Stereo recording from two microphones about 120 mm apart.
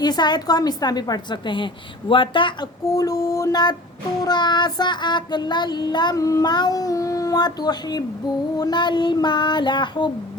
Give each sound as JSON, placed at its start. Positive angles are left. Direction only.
{"t": 0.0, "sound": "child singing", "side_deg": 35}
{"t": 2.9, "sound": "child singing", "side_deg": 30}